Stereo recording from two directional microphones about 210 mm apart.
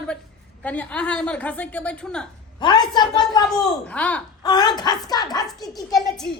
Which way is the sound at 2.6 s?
20° left (ahead or behind).